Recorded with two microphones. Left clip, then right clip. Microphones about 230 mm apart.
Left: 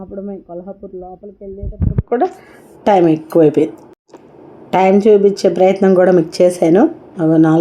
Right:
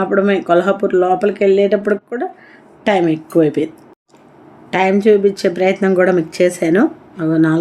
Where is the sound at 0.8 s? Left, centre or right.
Centre.